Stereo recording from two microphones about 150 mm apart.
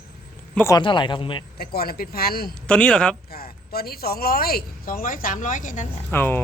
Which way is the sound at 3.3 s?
90° left.